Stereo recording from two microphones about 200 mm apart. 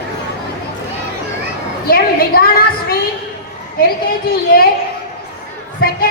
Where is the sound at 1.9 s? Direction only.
50° left (ahead or behind).